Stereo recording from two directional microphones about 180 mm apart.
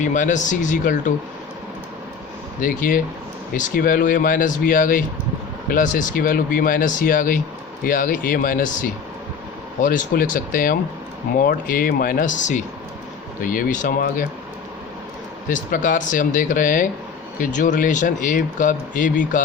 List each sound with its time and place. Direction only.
0.0 s speech: 45° left (ahead or behind)
2.6 s speech: 50° left (ahead or behind)
15.4 s speech: 45° left (ahead or behind)